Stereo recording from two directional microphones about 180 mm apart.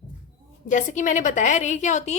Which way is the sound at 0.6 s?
45° left (ahead or behind).